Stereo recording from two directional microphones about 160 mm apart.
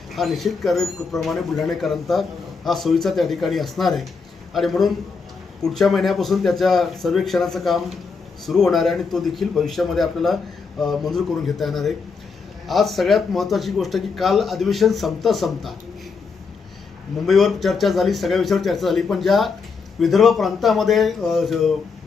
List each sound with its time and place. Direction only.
0.1 s a man's voice: centre (ahead or behind)
17.2 s a man's voice: centre (ahead or behind)